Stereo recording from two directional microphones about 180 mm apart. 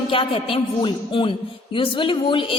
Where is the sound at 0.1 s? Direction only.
30° left (ahead or behind).